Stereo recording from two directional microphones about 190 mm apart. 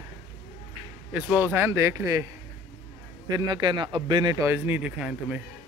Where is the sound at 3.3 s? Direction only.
20° right (ahead or behind); by 5.4 s 5° right (ahead or behind).